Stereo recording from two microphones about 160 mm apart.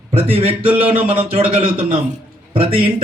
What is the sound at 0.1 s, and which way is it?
A man's voice, 35° right (ahead or behind).